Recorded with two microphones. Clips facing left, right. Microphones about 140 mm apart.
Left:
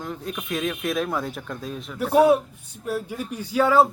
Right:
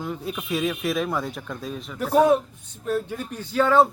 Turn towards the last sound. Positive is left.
turn(degrees=10)  # may be behind; listen again after turning